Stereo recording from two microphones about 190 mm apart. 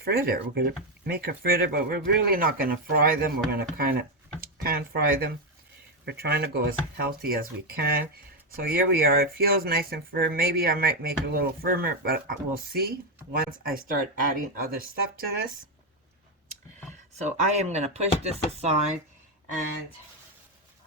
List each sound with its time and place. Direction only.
0.0 s speech: 55° right (ahead or behind)
17.2 s speech: 35° right (ahead or behind)